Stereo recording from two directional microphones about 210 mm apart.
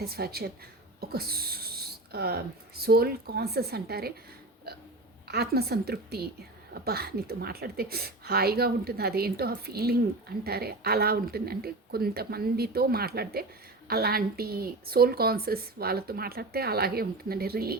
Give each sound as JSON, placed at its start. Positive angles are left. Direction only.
{"t": 0.0, "sound": "a woman's voice", "side_deg": -45}
{"t": 5.3, "sound": "a woman's voice", "side_deg": -50}